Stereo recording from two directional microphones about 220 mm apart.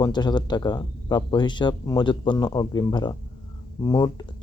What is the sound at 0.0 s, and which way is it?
Speech, 20° left (ahead or behind).